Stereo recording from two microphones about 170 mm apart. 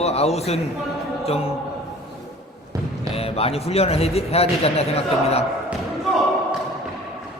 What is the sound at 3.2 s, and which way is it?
Speech, 35° left (ahead or behind).